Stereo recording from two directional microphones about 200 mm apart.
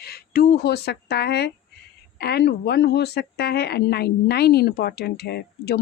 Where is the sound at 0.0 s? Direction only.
50° left (ahead or behind).